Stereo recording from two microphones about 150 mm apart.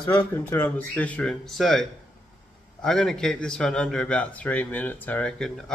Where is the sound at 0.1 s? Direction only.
10° left (ahead or behind).